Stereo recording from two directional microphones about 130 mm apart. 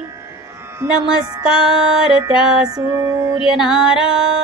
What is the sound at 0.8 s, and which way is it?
Music, 10° right (ahead or behind).